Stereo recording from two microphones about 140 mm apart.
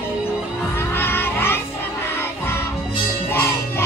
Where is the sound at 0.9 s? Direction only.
15° left (ahead or behind).